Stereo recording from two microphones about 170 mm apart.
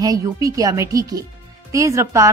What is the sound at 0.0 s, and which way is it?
A woman's voice, 20° right (ahead or behind).